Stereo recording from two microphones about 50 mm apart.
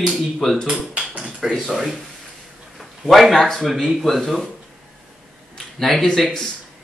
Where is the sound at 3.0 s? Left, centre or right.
Centre.